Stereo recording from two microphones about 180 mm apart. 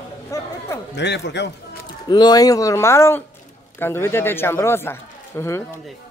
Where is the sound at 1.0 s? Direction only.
70° left (ahead or behind).